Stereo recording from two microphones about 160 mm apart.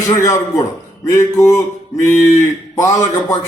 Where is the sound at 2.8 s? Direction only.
20° left (ahead or behind).